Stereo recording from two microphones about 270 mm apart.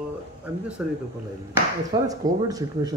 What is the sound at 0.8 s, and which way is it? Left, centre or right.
Speech, centre.